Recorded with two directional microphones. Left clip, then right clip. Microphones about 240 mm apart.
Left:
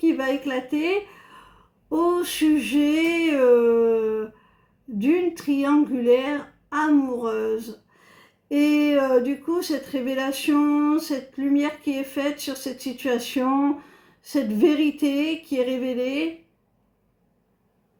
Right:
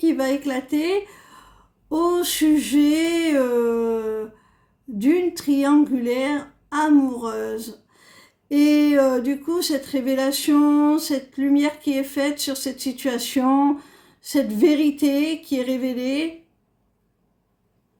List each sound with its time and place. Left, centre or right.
0.0 s speech: right